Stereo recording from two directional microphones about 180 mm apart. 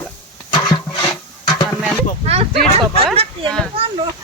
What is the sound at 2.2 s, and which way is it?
Speech, 35° right (ahead or behind).